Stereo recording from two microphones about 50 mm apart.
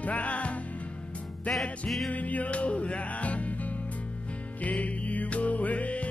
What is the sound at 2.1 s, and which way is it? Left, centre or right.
Music, left.